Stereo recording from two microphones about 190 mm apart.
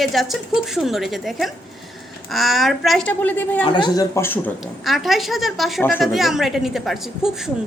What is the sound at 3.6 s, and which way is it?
Speech, 25° left (ahead or behind).